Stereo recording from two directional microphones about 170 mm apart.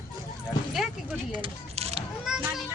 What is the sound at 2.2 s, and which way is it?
Children playing, 5° right (ahead or behind).